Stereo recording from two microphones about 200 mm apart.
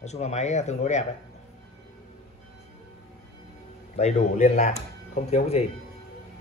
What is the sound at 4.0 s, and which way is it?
Speech, 35° left (ahead or behind).